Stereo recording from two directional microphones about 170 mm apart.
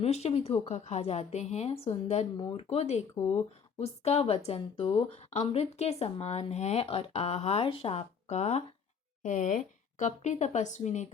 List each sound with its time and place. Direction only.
0.0 s speech: 40° left (ahead or behind)